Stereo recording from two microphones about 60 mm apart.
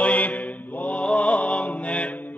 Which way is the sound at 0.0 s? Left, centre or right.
Left.